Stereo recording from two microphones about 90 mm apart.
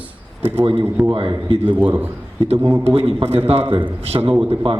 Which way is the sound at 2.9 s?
80° right.